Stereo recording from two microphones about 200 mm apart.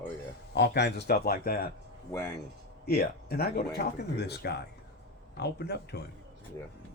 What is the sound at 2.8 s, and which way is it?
Speech, 50° left (ahead or behind).